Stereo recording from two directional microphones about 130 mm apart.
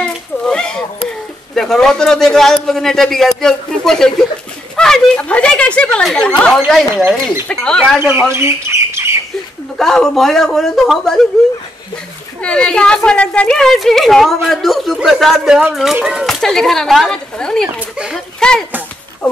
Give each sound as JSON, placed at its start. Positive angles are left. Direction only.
{"t": 0.0, "sound": "speech", "side_deg": 5}
{"t": 8.4, "sound": "squawk", "side_deg": -20}
{"t": 9.8, "sound": "a woman's voice", "side_deg": 5}
{"t": 12.4, "sound": "a woman's voice", "side_deg": 10}
{"t": 17.9, "sound": "speech", "side_deg": -5}
{"t": 18.4, "sound": "speech", "side_deg": 5}